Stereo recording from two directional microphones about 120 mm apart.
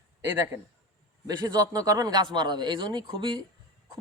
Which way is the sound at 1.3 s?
35° right (ahead or behind).